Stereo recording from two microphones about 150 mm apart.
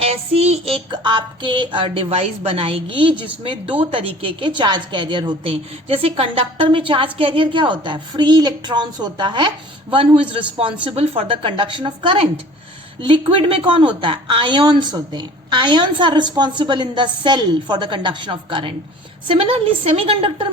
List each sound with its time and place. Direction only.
0.0 s a woman's voice: 45° right (ahead or behind)